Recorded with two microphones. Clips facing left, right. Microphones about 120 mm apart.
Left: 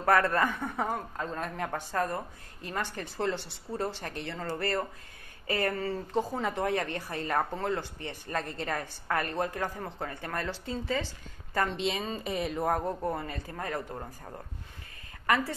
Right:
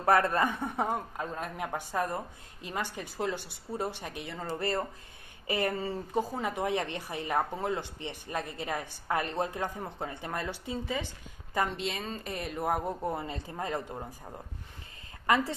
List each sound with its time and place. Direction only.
0.0 s a man's voice: 20° right (ahead or behind)
6.3 s speech: 5° right (ahead or behind)
6.6 s a man's voice: 20° right (ahead or behind)
11.7 s speech: centre (ahead or behind)
12.6 s a man's voice: 10° right (ahead or behind)
15.2 s a woman's voice: 20° right (ahead or behind)